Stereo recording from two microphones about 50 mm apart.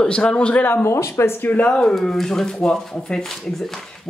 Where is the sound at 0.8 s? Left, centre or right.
Left.